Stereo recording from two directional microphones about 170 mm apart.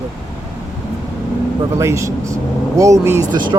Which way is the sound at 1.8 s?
15° right (ahead or behind).